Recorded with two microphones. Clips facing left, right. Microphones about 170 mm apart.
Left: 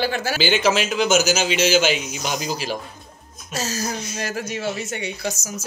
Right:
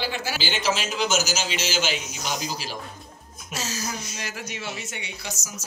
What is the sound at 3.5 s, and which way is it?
Speech, 45° left (ahead or behind).